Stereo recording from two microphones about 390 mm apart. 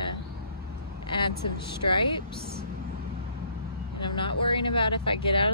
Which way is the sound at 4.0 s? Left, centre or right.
Centre.